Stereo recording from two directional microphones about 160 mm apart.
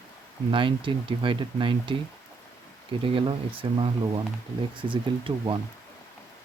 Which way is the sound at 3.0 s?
35° right (ahead or behind).